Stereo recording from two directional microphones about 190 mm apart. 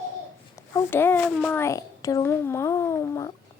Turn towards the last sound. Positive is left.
turn(degrees=15)  # may be behind; listen again after turning